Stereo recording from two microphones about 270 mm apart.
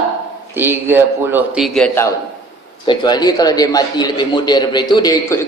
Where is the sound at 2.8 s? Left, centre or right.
Centre.